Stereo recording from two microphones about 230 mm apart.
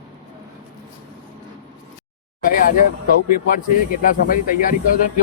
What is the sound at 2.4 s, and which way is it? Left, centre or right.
Speech, left.